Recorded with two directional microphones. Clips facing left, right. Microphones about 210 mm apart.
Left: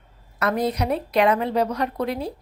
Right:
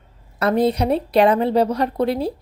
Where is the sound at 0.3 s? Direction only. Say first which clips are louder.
Right 5 dB; 30° right (ahead or behind).